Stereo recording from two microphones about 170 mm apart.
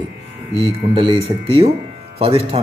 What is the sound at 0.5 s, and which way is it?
Speech, 35° right (ahead or behind).